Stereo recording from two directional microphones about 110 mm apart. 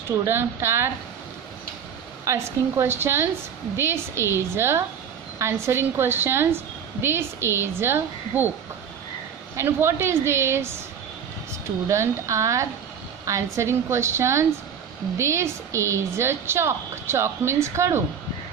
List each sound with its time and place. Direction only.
0.1 s a woman's voice: 25° right (ahead or behind)
2.2 s a woman's voice: 25° right (ahead or behind)
9.6 s a woman's voice: 25° right (ahead or behind)
11.9 s a woman's voice: 30° right (ahead or behind)